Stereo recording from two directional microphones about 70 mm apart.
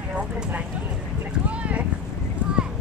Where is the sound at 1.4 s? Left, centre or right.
Centre.